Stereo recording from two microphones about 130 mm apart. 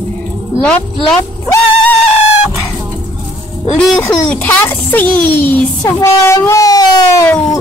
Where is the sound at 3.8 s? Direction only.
10° left (ahead or behind); by 7.2 s 25° left (ahead or behind).